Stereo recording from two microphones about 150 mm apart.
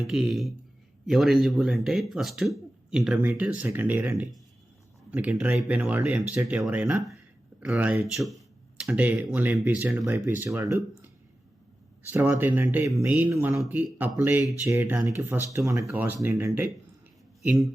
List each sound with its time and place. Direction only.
0.0 s speech: centre (ahead or behind)
12.1 s speech: 15° right (ahead or behind)